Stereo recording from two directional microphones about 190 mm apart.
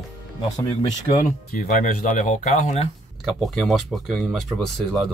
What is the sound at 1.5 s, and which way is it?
Speech, 45° left (ahead or behind).